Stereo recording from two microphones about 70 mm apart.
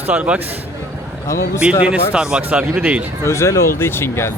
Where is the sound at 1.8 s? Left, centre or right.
Centre.